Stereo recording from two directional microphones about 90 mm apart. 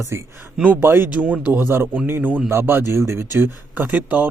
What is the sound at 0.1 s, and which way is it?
Speech, 30° right (ahead or behind).